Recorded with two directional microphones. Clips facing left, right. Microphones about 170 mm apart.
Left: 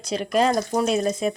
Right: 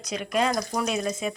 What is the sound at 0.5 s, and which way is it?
Speech, 25° left (ahead or behind).